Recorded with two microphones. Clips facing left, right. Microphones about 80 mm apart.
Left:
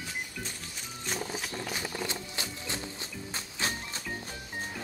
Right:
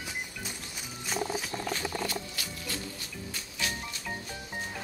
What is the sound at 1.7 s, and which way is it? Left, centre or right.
Music, left.